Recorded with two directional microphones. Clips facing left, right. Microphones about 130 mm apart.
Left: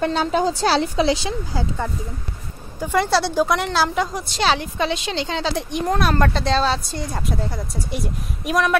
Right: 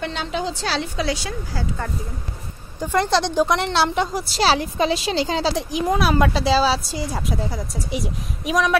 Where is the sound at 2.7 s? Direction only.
10° left (ahead or behind).